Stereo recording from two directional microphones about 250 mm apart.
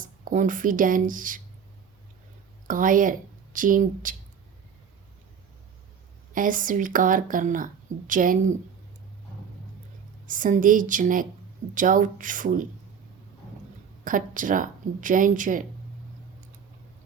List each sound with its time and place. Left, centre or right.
0.0 s speech: right
2.6 s speech: right
6.3 s speech: right
10.2 s speech: right
14.0 s speech: right